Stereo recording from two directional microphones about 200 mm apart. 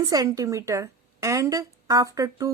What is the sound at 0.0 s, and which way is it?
A woman's voice, 20° right (ahead or behind).